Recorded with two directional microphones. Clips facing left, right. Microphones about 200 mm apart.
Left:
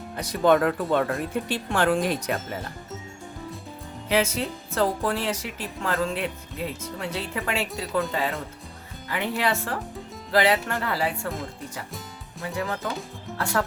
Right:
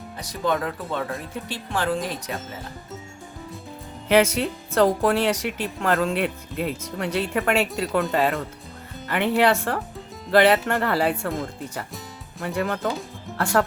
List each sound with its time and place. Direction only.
0.2 s speech: 55° left (ahead or behind)
4.1 s speech: 65° right (ahead or behind)
12.5 s speech: 60° right (ahead or behind)
13.4 s speech: 50° right (ahead or behind)